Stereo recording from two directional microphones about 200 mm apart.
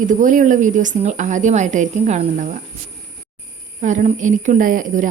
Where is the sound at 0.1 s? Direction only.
40° right (ahead or behind).